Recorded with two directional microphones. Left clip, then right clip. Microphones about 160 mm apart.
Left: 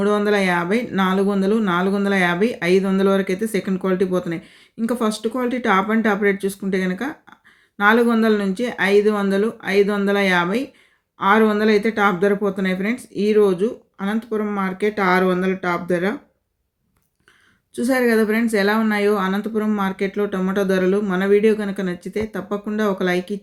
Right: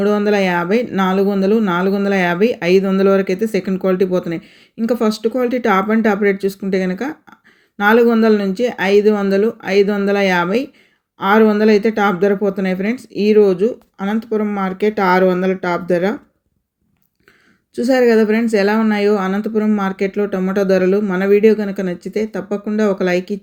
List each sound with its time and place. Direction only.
0.0 s speech: 15° right (ahead or behind)
17.7 s speech: 15° right (ahead or behind)